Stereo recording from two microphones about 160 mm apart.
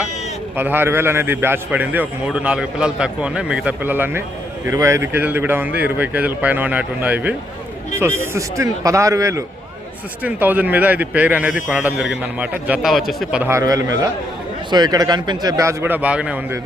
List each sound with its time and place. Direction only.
0.5 s a man's voice: 15° right (ahead or behind)
10.2 s a man's voice: 10° right (ahead or behind)
13.4 s a man's voice: 20° right (ahead or behind)